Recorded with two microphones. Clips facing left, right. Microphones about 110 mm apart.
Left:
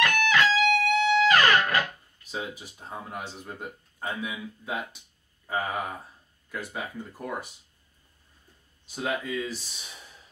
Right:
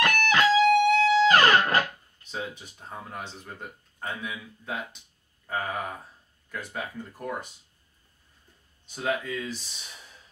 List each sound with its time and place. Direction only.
0.0 s music: 35° right (ahead or behind)
2.3 s speech: 10° left (ahead or behind)
8.9 s speech: 5° left (ahead or behind)